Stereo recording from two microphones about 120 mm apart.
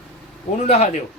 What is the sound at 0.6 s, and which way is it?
Speech, 70° left (ahead or behind).